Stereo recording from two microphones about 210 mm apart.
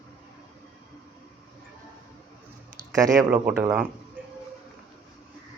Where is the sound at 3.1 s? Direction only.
5° right (ahead or behind).